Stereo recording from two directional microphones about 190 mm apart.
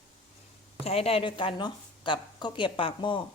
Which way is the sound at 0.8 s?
30° left (ahead or behind).